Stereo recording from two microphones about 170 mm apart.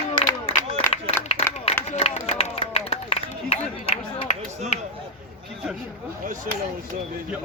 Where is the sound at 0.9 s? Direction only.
35° left (ahead or behind).